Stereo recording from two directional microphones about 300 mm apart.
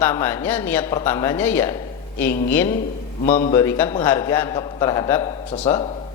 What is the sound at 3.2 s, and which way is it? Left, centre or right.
Speech, left.